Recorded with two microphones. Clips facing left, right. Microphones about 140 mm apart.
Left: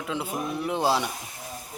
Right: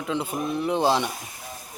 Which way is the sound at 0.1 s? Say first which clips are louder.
Right 3 dB; 5° left (ahead or behind).